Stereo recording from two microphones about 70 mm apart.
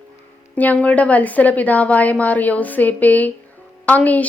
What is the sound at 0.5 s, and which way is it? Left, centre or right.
A woman's voice, left.